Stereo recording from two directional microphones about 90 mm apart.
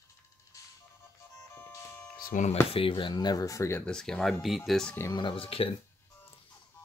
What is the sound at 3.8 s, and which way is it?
Speech, 5° left (ahead or behind).